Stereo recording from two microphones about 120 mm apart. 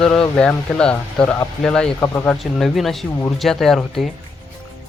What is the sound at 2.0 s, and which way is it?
Speech, 15° left (ahead or behind).